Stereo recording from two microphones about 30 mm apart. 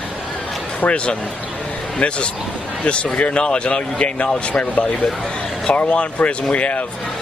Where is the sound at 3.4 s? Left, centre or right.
Left.